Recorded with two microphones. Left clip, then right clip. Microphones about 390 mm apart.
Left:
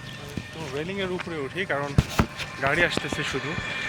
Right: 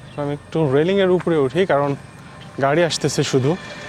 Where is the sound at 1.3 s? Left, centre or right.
Right.